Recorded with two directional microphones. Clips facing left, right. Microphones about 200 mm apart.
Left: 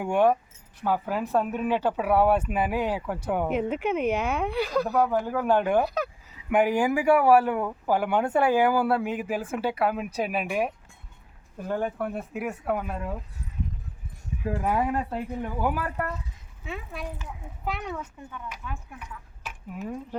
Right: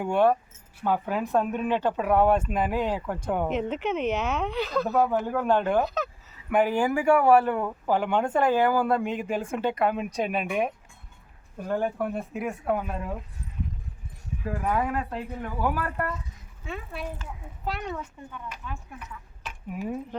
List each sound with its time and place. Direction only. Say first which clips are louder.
0.0 s speech: even; 10° left (ahead or behind)
5.0 s speech: even; centre (ahead or behind)
11.7 s speech: right 1 dB; centre (ahead or behind)
14.4 s speech: left 1 dB; 20° left (ahead or behind); by 20.0 s 5° right (ahead or behind)